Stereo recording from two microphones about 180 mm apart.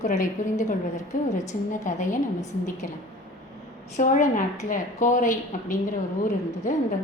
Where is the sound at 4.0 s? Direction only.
45° left (ahead or behind).